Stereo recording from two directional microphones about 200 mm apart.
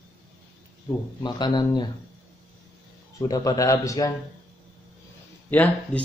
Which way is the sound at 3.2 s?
15° left (ahead or behind).